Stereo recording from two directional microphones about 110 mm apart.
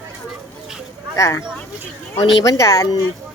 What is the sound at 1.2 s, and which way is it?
Speech, 25° left (ahead or behind).